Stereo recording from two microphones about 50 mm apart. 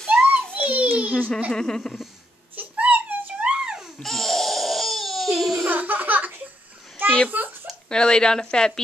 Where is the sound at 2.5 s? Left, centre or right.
Right.